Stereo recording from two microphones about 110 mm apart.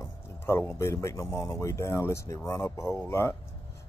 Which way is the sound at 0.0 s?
25° left (ahead or behind).